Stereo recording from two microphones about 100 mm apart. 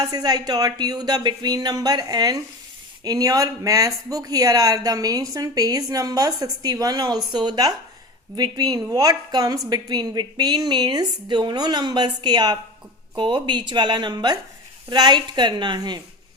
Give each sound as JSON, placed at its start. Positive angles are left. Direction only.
{"t": 0.0, "sound": "a woman's voice", "side_deg": -40}
{"t": 13.1, "sound": "a woman's voice", "side_deg": -55}